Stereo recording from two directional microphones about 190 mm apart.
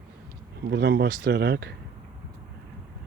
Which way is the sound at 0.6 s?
60° right (ahead or behind).